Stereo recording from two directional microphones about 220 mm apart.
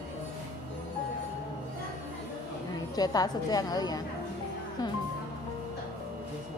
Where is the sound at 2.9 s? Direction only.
15° left (ahead or behind).